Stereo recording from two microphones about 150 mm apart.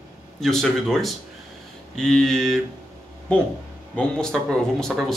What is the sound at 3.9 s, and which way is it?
Speech, 5° left (ahead or behind).